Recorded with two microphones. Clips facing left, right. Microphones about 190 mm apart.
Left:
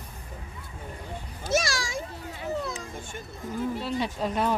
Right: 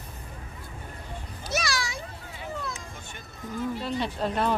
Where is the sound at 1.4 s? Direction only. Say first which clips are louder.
Left 3 dB; 45° left (ahead or behind).